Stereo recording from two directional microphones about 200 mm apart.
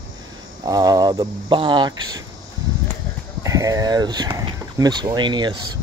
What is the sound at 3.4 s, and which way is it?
Speech, 15° right (ahead or behind).